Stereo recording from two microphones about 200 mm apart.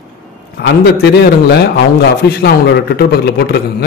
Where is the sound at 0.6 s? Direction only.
55° left (ahead or behind).